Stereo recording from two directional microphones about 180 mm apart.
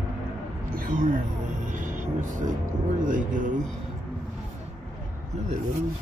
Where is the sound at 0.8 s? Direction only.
50° right (ahead or behind).